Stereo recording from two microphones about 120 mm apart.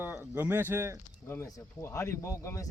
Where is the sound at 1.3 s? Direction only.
25° left (ahead or behind).